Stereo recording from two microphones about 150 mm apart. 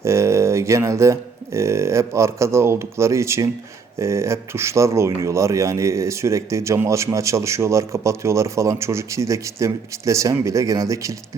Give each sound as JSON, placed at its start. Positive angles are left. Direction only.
{"t": 0.0, "sound": "speech", "side_deg": -20}